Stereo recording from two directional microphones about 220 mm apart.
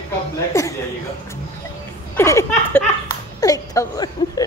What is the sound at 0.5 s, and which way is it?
Speech, 15° left (ahead or behind).